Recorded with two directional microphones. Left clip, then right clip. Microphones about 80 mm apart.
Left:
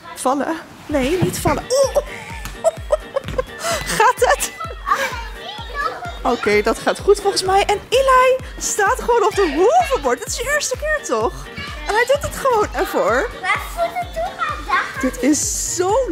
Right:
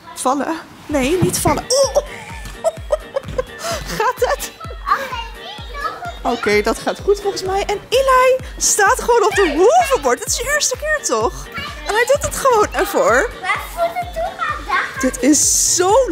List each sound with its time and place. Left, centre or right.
0.2 s speech: centre
2.6 s chuckle: centre
6.0 s speech: centre
9.8 s speech: right
10.0 s speech: centre